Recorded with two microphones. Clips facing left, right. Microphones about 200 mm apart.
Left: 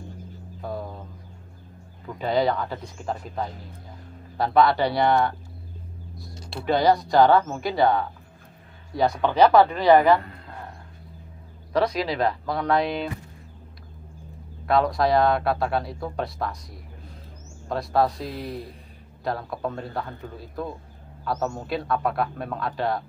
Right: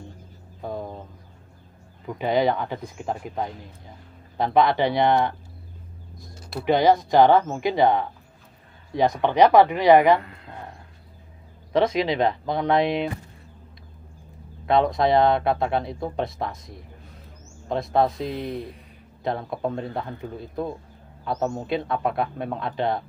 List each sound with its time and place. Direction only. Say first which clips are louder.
0.6 s a sound: right 1 dB; 20° right (ahead or behind)
2.1 s speech: right 1 dB; 15° right (ahead or behind)
6.6 s speech: right 2 dB; 20° right (ahead or behind)
11.7 s speech: right 2 dB; 20° right (ahead or behind)
14.7 s speech: right 1 dB; 20° right (ahead or behind)
19.2 s speech: right 2 dB; 20° right (ahead or behind)